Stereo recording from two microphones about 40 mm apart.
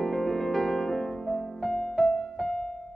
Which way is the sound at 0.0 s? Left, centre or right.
Centre.